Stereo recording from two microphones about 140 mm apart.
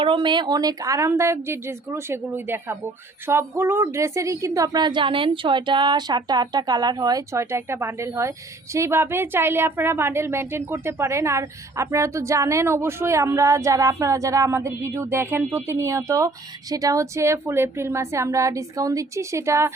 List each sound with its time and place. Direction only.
0.0 s speech: 35° right (ahead or behind); by 19.7 s 20° right (ahead or behind)